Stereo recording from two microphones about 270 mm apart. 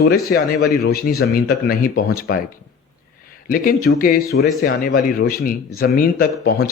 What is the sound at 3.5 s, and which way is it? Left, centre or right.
Speech, left.